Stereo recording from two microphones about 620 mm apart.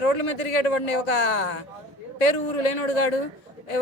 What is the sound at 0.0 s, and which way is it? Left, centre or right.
Speech, left.